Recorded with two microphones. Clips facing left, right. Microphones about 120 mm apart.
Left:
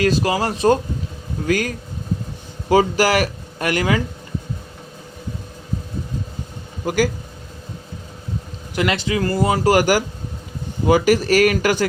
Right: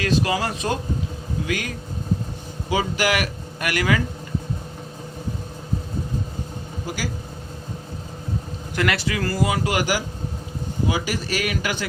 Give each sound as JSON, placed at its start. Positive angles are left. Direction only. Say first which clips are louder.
{"t": 0.0, "sound": "speech", "louder": "left 4 dB", "side_deg": 35}
{"t": 6.8, "sound": "speech", "louder": "left 11 dB", "side_deg": 50}
{"t": 8.7, "sound": "a man's voice", "louder": "left 3 dB", "side_deg": 20}